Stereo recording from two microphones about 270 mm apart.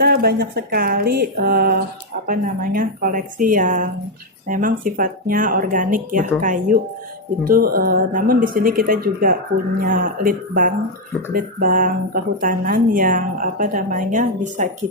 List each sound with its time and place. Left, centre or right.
0.0 s speech: right